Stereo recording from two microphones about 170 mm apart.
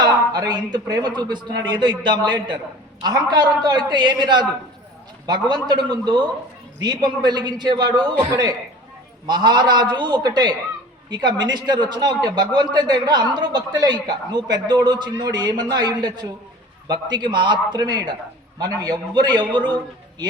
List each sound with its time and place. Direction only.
0.0 s a man's voice: 25° right (ahead or behind)